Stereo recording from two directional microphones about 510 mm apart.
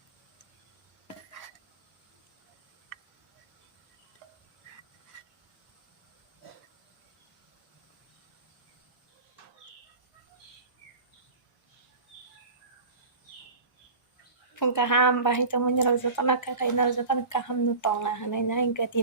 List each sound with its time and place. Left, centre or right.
14.5 s a woman's voice: left